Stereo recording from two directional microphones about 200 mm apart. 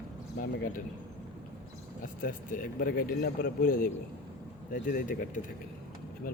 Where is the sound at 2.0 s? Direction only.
40° left (ahead or behind).